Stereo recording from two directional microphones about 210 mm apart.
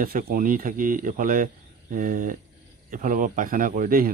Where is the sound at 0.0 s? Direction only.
45° right (ahead or behind).